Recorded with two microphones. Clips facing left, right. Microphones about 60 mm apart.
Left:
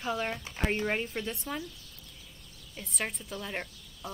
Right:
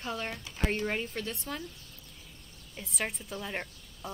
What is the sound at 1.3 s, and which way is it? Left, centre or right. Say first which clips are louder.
Speech: left 2 dB; centre.